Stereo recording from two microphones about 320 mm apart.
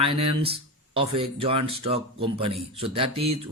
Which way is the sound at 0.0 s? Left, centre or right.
Centre.